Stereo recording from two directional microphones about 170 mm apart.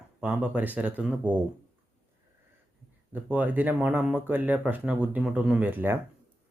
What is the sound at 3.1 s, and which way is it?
Speech, 10° right (ahead or behind).